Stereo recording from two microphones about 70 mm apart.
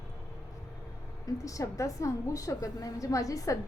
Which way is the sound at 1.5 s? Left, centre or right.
Left.